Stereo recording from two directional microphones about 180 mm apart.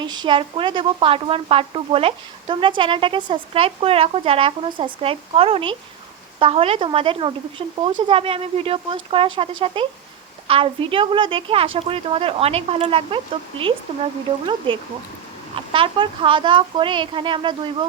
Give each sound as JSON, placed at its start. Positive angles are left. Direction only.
{"t": 0.0, "sound": "a woman's voice", "side_deg": -25}
{"t": 15.5, "sound": "speech", "side_deg": -30}